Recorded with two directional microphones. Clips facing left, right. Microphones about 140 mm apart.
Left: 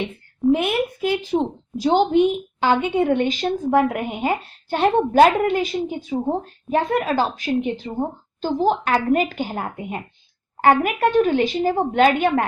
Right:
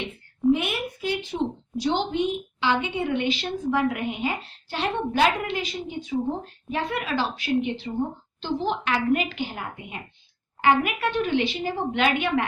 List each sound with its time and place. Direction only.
0.5 s a woman's voice: 50° left (ahead or behind)